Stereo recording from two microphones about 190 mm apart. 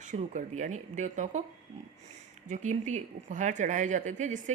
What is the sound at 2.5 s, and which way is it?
A woman's voice, 40° right (ahead or behind).